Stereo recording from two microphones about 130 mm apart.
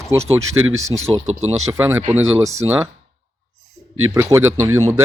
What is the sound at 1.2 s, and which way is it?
Speech, 55° right (ahead or behind).